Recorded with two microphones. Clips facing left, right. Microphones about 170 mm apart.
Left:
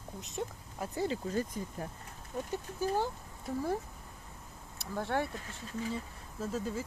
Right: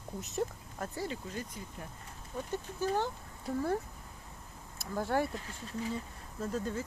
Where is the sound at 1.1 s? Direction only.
40° left (ahead or behind).